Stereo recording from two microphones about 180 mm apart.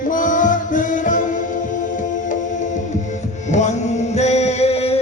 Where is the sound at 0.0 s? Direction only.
45° left (ahead or behind).